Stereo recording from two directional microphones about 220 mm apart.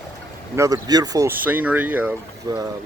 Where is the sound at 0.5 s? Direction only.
15° right (ahead or behind).